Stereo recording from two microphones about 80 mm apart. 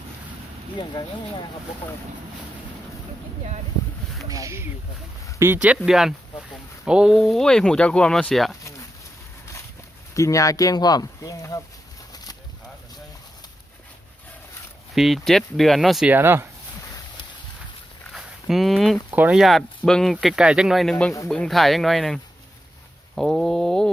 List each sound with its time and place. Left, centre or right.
0.8 s speech: left
4.3 s speech: right
5.5 s speech: centre
7.2 s speech: centre
10.2 s speech: left
11.2 s speech: left
12.1 s a sound: left
14.9 s speech: centre
16.0 s speech: right
18.1 s a sound: centre
19.3 s speech: centre
20.2 s speech: centre
21.2 s speech: centre
23.1 s a sound: centre